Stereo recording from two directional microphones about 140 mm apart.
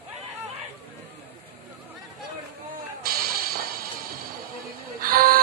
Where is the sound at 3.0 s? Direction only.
90° right.